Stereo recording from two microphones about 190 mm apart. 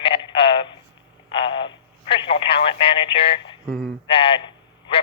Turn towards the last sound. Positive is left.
turn(degrees=25)  # may be behind; listen again after turning